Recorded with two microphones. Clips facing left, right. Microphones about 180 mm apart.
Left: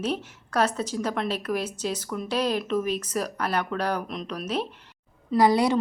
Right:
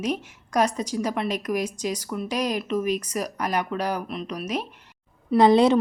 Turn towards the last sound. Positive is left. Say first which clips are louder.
# right 4 dB
turn(degrees=-25)  # may be behind; listen again after turning